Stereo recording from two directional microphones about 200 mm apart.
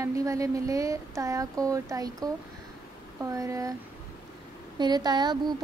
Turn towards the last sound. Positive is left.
turn(degrees=-20)  # may be behind; listen again after turning